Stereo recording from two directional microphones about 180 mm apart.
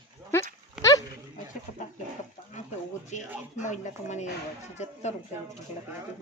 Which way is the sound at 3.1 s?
40° left (ahead or behind).